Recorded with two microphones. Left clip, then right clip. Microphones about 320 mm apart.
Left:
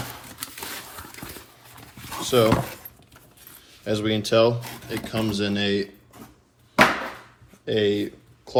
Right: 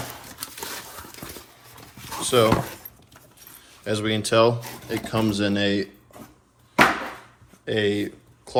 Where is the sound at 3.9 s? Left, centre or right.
Right.